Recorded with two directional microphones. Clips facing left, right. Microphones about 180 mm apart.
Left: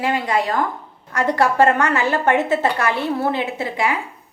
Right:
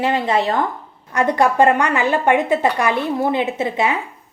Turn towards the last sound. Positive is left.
turn(degrees=-20)  # may be behind; listen again after turning